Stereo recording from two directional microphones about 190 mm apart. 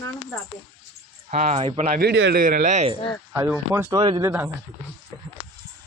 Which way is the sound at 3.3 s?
15° right (ahead or behind).